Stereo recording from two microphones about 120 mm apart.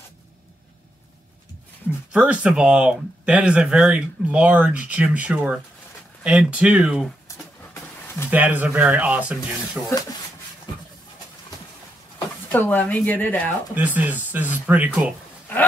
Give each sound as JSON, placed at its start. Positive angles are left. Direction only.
{"t": 2.1, "sound": "speech", "side_deg": -10}
{"t": 7.2, "sound": "a sound", "side_deg": 20}
{"t": 8.3, "sound": "speech", "side_deg": -15}
{"t": 12.4, "sound": "speech", "side_deg": 15}
{"t": 13.7, "sound": "speech", "side_deg": -15}